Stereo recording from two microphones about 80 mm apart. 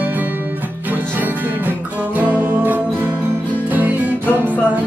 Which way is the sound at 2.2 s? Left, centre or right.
Centre.